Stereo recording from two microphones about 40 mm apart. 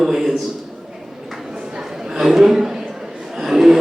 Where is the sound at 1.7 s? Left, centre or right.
Centre.